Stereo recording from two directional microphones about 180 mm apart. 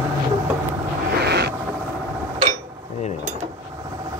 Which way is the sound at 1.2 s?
65° right (ahead or behind).